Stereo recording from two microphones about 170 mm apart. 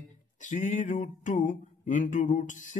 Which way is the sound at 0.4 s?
45° left (ahead or behind).